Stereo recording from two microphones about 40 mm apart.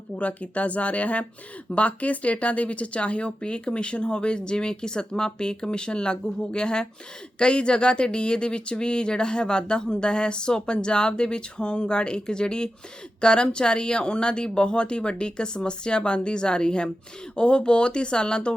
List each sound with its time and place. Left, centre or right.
0.2 s speech: left